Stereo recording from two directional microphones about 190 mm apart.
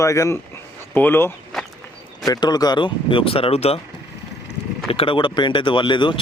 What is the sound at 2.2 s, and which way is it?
Speech, 20° left (ahead or behind).